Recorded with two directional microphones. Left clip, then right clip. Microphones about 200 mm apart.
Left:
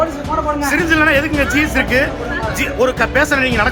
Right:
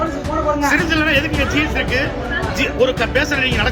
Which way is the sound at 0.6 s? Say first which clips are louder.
Left 5 dB; 25° left (ahead or behind).